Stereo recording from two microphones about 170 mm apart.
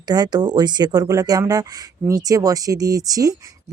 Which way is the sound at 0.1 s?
25° right (ahead or behind).